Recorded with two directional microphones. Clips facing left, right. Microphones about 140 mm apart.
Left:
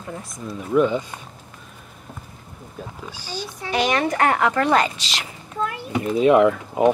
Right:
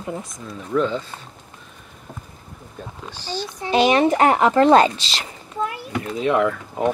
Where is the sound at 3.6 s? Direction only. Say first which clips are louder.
Right 5 dB; 20° right (ahead or behind).